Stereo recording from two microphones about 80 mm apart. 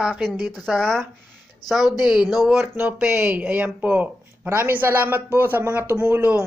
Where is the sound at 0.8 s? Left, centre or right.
Centre.